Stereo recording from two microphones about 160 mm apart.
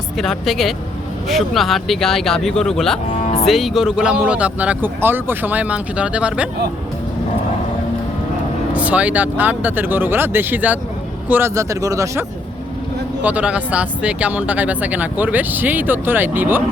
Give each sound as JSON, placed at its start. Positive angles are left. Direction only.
{"t": 0.2, "sound": "speech", "side_deg": 0}
{"t": 8.7, "sound": "speech", "side_deg": -10}
{"t": 13.2, "sound": "speech", "side_deg": -10}